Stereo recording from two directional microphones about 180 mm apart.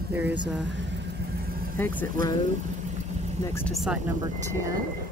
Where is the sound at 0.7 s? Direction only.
80° right; by 1.8 s 55° right (ahead or behind).